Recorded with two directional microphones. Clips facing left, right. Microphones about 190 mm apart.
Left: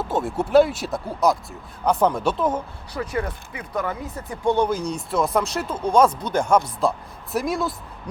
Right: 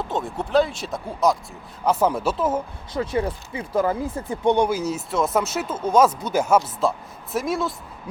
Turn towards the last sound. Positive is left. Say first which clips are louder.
# even
turn(degrees=0)  # may be behind; listen again after turning